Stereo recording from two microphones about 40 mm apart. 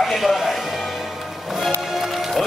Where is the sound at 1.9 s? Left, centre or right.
Centre.